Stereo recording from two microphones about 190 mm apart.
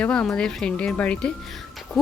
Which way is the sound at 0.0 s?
5° left (ahead or behind).